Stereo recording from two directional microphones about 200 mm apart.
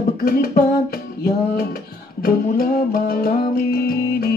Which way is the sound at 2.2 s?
50° left (ahead or behind).